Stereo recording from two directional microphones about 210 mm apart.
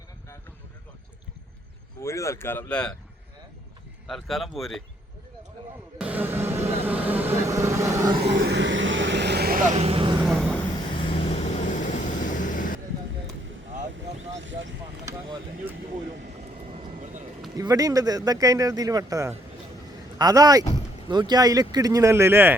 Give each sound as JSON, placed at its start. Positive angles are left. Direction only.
{"t": 2.0, "sound": "speech", "side_deg": 15}
{"t": 4.0, "sound": "speech", "side_deg": 0}
{"t": 6.0, "sound": "music", "side_deg": -5}
{"t": 6.8, "sound": "vehicle", "side_deg": -10}
{"t": 8.2, "sound": "vehicle", "side_deg": -55}
{"t": 9.7, "sound": "vehicle", "side_deg": -30}
{"t": 11.1, "sound": "vehicle", "side_deg": 30}
{"t": 14.2, "sound": "vehicle", "side_deg": -60}
{"t": 15.0, "sound": "speech", "side_deg": -15}
{"t": 16.6, "sound": "vehicle", "side_deg": -30}
{"t": 17.6, "sound": "speech", "side_deg": -15}